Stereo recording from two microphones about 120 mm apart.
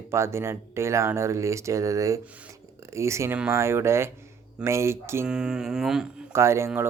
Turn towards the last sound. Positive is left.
turn(degrees=-20)  # may be behind; listen again after turning